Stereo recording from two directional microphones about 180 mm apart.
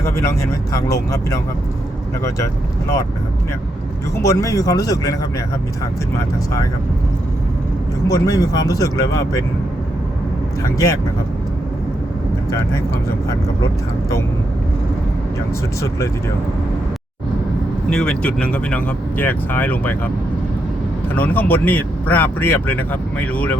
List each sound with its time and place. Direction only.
0.0 s speech: 15° left (ahead or behind)
4.2 s speech: 20° left (ahead or behind)
6.1 s speech: 15° left (ahead or behind)
8.0 s speech: 20° left (ahead or behind)
10.6 s speech: 20° left (ahead or behind)
17.8 s speech: 5° left (ahead or behind)
21.2 s speech: 10° left (ahead or behind)